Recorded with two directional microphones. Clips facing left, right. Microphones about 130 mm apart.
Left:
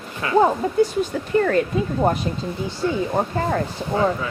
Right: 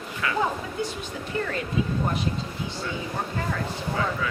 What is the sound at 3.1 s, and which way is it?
Speech, 45° left (ahead or behind).